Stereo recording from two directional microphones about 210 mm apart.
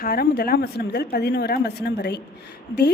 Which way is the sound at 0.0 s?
45° left (ahead or behind).